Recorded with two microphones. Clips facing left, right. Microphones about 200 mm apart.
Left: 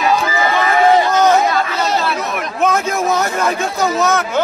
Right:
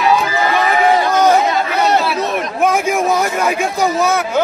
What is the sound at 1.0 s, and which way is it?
Chatter, 10° right (ahead or behind).